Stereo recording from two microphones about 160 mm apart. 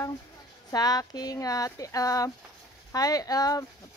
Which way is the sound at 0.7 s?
25° left (ahead or behind).